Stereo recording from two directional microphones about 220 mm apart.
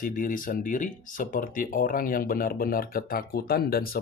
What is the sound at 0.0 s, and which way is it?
Speech, 40° left (ahead or behind).